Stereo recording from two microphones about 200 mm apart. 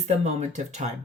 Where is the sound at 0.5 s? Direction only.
35° right (ahead or behind).